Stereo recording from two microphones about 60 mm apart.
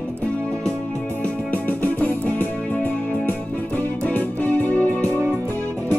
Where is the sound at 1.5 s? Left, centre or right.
Left.